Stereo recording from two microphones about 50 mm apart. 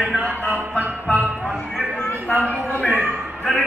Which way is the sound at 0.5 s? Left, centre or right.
Right.